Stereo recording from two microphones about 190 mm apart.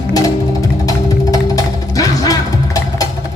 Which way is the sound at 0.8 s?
20° left (ahead or behind).